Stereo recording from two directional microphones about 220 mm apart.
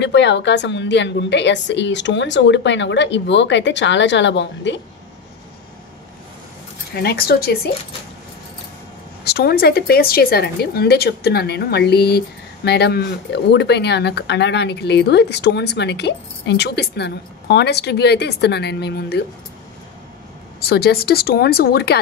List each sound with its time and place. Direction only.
0.0 s a woman's voice: 55° left (ahead or behind)
7.0 s speech: 45° left (ahead or behind)
9.2 s speech: 45° left (ahead or behind)
20.6 s speech: 45° left (ahead or behind)